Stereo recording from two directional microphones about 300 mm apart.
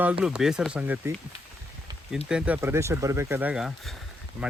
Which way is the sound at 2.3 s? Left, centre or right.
Centre.